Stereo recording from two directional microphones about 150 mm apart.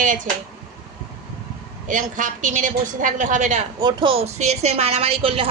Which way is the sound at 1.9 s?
60° right (ahead or behind).